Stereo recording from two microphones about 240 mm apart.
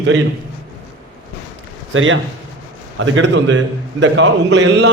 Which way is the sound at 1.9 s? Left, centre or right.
Right.